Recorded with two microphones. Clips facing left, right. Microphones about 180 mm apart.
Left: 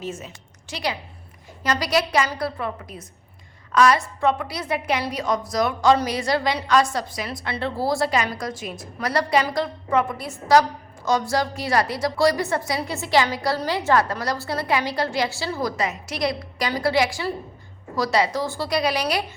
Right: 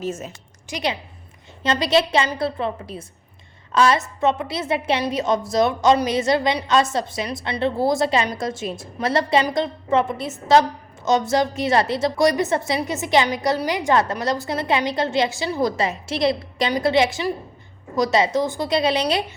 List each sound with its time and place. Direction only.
0.0 s a woman's voice: 45° right (ahead or behind)
0.7 s a woman's voice: 20° right (ahead or behind)